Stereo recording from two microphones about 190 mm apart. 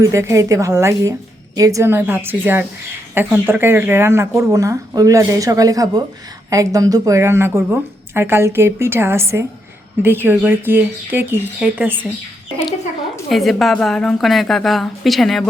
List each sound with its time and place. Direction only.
0.0 s a woman's voice: 15° right (ahead or behind)
13.3 s a woman's voice: centre (ahead or behind)